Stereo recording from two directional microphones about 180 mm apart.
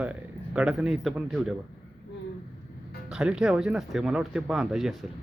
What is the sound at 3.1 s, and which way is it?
Speech, 5° right (ahead or behind).